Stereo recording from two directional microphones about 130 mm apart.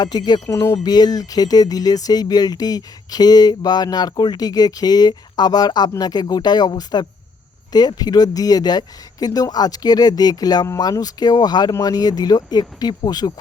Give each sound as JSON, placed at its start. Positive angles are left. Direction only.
{"t": 0.0, "sound": "speech", "side_deg": 30}